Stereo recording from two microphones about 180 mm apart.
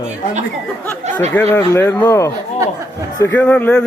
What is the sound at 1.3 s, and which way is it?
Speech, 10° left (ahead or behind).